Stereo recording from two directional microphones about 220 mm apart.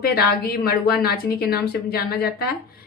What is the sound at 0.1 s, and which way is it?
Speech, 45° left (ahead or behind).